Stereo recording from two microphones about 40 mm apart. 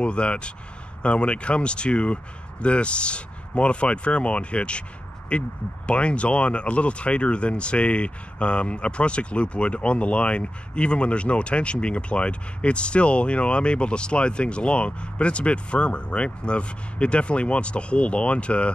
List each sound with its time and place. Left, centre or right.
0.0 s speech: left